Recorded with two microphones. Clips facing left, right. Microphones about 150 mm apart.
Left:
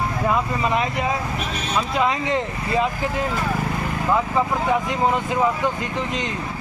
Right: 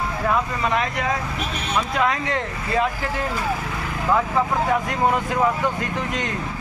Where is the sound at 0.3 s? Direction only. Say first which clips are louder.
Even; 5° left (ahead or behind).